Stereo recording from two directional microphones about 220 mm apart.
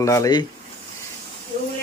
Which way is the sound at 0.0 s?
15° left (ahead or behind).